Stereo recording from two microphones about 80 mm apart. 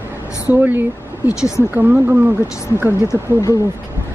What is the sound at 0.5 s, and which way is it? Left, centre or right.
Speech, right.